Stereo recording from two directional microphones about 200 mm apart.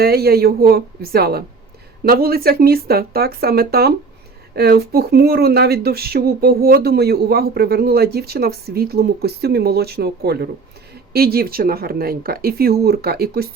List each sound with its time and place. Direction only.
0.0 s speech: 50° right (ahead or behind)